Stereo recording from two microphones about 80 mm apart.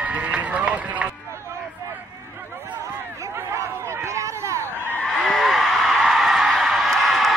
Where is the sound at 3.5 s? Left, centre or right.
Right.